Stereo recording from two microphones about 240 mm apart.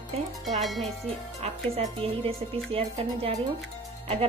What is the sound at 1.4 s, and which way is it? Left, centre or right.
Speech, right.